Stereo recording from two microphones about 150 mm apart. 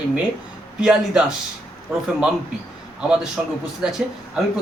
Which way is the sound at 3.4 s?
5° right (ahead or behind).